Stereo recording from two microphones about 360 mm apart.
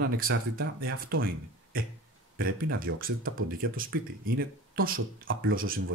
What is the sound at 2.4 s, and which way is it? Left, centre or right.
Speech, right.